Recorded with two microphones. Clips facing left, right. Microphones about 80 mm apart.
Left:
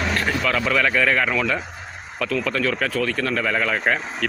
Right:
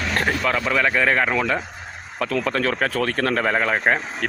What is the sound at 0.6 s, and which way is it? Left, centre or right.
A man's voice, right.